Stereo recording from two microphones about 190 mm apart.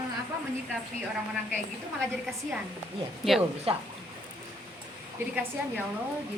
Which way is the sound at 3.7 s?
30° right (ahead or behind).